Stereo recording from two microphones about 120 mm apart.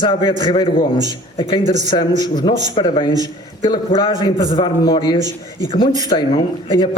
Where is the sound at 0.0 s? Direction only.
40° left (ahead or behind).